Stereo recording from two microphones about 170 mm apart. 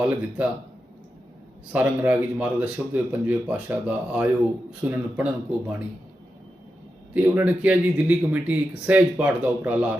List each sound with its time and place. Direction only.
0.0 s speech: 10° right (ahead or behind)
1.7 s speech: 10° right (ahead or behind)
7.1 s speech: 10° right (ahead or behind)